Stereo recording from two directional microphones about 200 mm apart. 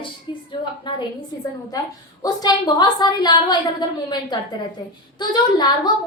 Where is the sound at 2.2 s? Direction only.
20° left (ahead or behind).